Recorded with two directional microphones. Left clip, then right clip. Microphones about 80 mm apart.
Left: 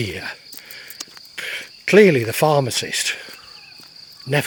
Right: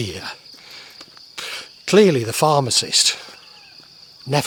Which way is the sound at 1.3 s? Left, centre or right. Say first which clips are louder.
Left 2 dB; right.